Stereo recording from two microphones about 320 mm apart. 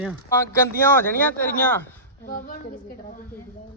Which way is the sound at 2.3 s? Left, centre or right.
Left.